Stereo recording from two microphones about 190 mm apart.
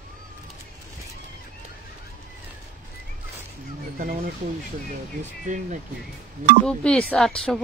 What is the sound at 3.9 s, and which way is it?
Speech, 50° right (ahead or behind).